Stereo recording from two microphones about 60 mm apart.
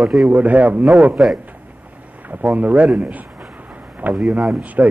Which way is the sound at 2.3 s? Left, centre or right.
Right.